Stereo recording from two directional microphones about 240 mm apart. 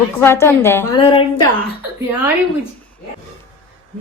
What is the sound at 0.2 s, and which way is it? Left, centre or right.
Speech, centre.